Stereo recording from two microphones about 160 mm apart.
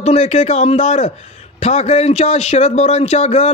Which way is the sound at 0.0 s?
45° left (ahead or behind).